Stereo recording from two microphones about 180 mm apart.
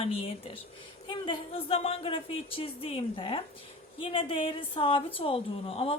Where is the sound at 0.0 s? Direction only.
30° left (ahead or behind).